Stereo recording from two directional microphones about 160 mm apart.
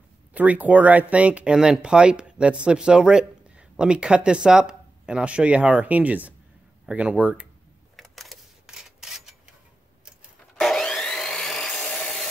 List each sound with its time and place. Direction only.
0.3 s speech: 10° right (ahead or behind)
7.9 s camera: centre (ahead or behind)
10.5 s wood: centre (ahead or behind)